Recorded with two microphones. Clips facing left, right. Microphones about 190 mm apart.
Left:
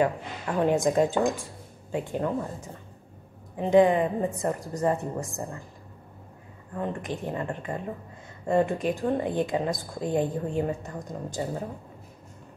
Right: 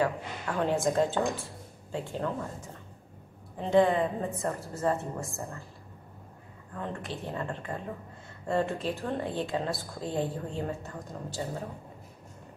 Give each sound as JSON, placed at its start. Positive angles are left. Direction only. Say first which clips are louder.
{"t": 0.0, "sound": "a woman's voice", "louder": "left 4 dB", "side_deg": 15}
{"t": 6.7, "sound": "a woman's voice", "louder": "left 5 dB", "side_deg": 15}